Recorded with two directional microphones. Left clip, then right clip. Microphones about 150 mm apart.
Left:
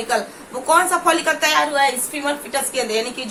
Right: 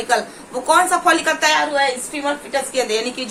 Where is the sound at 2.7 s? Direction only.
25° right (ahead or behind).